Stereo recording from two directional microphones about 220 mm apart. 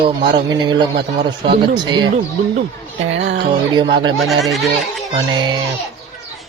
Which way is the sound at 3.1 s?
55° right (ahead or behind).